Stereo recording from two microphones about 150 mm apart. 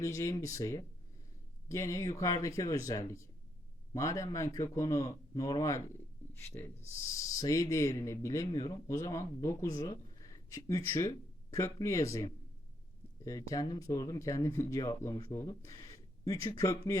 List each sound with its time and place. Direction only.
0.0 s speech: 20° left (ahead or behind)